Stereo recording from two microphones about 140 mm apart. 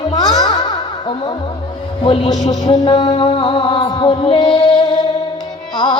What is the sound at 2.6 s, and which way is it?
Music, 30° left (ahead or behind).